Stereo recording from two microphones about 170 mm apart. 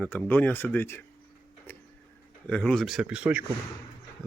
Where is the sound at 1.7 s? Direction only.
10° left (ahead or behind).